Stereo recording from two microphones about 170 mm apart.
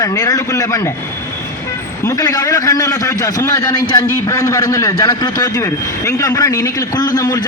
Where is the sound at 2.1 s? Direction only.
20° left (ahead or behind).